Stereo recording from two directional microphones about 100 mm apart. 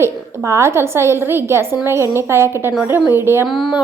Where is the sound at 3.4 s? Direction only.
Centre (ahead or behind).